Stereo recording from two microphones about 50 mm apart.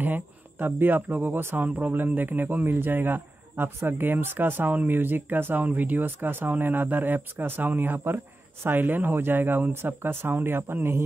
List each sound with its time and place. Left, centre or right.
0.0 s speech: right
1.6 s speech: right